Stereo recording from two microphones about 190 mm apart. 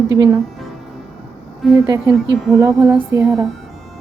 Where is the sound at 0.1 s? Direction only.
20° right (ahead or behind).